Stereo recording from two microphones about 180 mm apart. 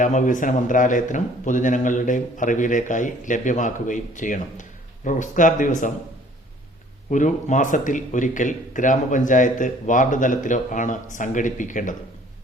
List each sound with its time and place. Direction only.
0.0 s speech: 45° left (ahead or behind)
7.1 s speech: 45° left (ahead or behind)